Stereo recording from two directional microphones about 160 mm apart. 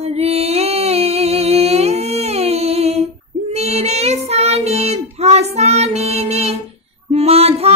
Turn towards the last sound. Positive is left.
turn(degrees=-40)  # may be behind; listen again after turning